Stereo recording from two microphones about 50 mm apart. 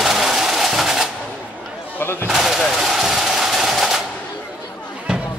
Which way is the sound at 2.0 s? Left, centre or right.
Left.